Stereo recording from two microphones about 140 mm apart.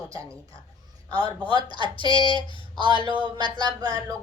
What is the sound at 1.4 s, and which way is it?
Speech, 40° left (ahead or behind).